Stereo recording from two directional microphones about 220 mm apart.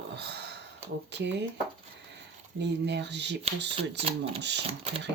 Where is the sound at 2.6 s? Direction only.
50° right (ahead or behind).